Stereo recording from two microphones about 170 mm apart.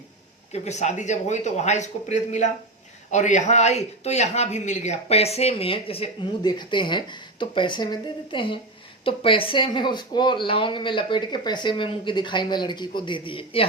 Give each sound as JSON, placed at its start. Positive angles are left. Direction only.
{"t": 0.5, "sound": "speech", "side_deg": 40}